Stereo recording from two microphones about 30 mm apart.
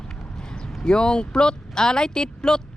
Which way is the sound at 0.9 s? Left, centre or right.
Left.